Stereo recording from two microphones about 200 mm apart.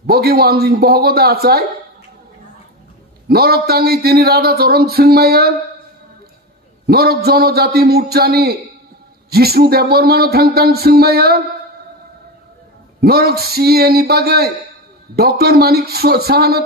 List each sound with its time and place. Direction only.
0.0 s speech: 50° right (ahead or behind)
3.3 s speech: 50° right (ahead or behind)
6.9 s speech: 50° right (ahead or behind)
13.0 s speech: 50° right (ahead or behind)